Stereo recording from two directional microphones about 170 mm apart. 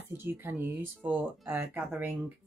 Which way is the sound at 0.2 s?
15° right (ahead or behind).